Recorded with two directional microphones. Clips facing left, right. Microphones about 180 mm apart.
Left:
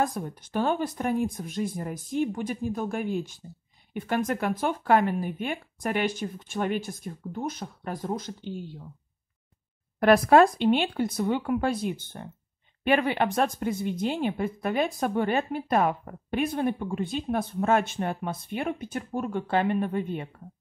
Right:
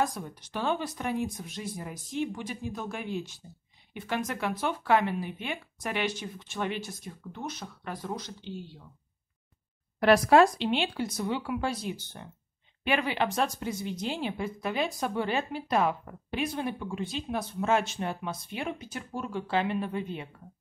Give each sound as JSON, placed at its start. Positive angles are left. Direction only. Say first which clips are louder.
{"t": 0.0, "sound": "speech", "louder": "left 2 dB", "side_deg": 55}
{"t": 9.9, "sound": "speech", "louder": "left 2 dB", "side_deg": 50}